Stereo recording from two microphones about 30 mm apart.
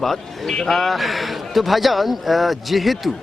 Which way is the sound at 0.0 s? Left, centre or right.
Centre.